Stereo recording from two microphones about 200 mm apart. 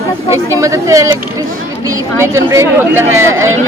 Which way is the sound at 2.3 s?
15° right (ahead or behind).